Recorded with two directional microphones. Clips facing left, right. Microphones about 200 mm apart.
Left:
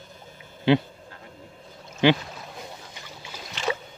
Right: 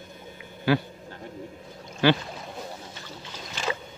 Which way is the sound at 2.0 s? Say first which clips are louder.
Left 2 dB; 20° left (ahead or behind).